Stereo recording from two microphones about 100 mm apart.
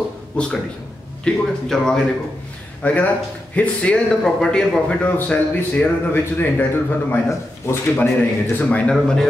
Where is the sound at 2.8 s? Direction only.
15° left (ahead or behind).